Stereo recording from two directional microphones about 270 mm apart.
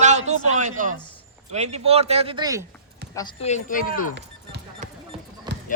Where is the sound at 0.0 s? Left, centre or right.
Right.